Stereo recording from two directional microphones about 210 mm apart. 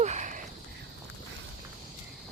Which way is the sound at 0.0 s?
35° right (ahead or behind).